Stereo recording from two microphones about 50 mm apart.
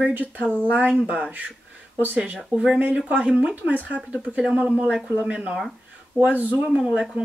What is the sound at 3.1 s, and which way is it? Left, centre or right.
Speech, right.